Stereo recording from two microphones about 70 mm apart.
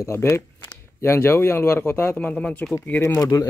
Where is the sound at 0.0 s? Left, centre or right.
Left; by 2.7 s centre.